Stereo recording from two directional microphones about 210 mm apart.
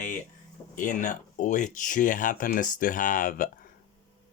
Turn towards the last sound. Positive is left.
turn(degrees=40)  # may be behind; listen again after turning